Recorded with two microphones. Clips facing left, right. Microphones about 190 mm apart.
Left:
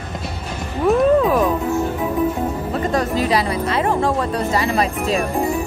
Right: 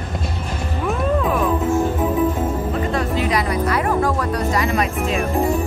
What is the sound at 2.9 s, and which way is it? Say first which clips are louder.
Music: left 4 dB; 40° left (ahead or behind).